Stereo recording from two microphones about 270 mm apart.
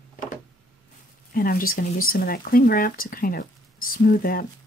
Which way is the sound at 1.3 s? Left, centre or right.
Left.